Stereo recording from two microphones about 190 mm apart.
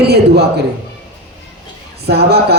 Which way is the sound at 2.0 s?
60° right (ahead or behind).